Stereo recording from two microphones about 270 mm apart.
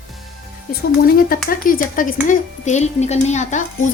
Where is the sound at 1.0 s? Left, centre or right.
Left.